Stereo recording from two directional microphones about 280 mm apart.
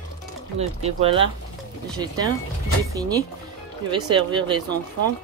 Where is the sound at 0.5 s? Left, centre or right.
Right.